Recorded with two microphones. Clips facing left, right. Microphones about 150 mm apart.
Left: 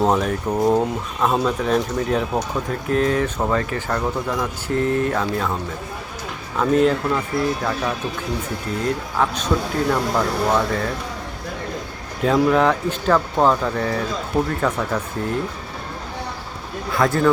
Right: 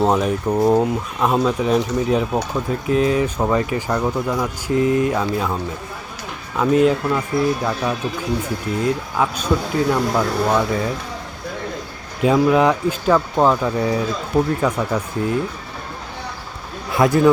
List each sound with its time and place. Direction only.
0.0 s speech: 5° right (ahead or behind)
6.6 s speech: 5° right (ahead or behind)
9.1 s speech: 10° right (ahead or behind)
12.2 s speech: 5° right (ahead or behind)
16.9 s speech: 20° right (ahead or behind)